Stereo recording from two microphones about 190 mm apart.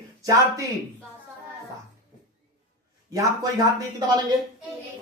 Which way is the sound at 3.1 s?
20° right (ahead or behind).